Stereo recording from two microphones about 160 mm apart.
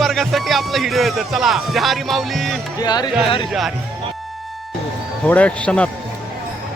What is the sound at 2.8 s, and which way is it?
Music, 25° left (ahead or behind).